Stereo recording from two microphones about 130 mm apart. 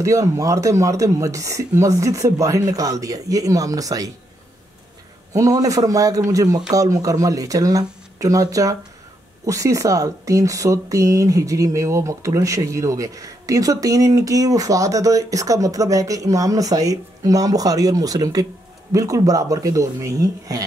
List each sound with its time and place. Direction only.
0.0 s speech: 25° right (ahead or behind)
5.3 s speech: 25° right (ahead or behind)